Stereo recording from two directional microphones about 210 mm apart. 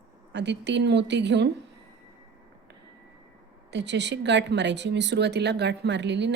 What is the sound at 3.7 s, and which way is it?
A woman's voice, 55° right (ahead or behind).